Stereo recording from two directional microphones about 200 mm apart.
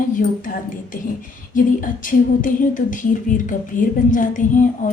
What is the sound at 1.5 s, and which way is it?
Speech, 40° left (ahead or behind).